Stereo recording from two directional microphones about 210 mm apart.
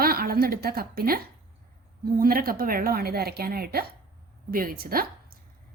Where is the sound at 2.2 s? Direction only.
45° right (ahead or behind).